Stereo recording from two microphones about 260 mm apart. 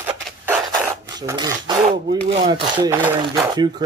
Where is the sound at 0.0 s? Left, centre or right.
Centre.